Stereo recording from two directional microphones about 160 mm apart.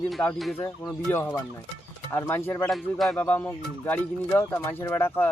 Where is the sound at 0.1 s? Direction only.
5° left (ahead or behind).